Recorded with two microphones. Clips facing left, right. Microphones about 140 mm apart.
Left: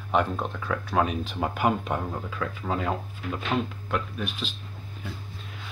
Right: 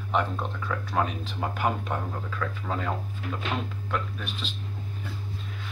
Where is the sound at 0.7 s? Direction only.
5° left (ahead or behind).